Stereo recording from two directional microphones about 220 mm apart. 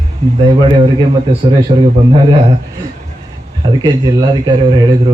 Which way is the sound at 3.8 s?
20° right (ahead or behind).